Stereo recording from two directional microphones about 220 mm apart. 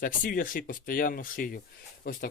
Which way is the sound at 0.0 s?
40° left (ahead or behind).